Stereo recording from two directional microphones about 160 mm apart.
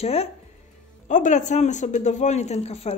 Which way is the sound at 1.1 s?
50° left (ahead or behind).